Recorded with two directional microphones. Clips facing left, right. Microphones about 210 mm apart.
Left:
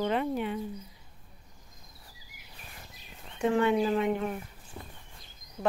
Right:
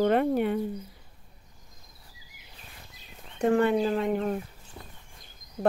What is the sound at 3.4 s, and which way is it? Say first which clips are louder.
Speech: right 2 dB; 45° right (ahead or behind).